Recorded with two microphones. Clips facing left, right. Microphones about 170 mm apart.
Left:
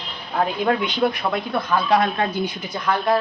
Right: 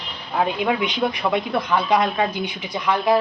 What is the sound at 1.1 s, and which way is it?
Speech, centre (ahead or behind).